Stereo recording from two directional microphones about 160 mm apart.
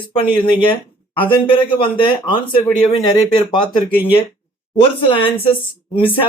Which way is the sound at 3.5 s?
30° left (ahead or behind).